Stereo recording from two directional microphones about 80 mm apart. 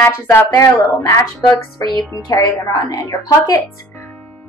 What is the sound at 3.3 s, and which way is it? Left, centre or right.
Speech, left.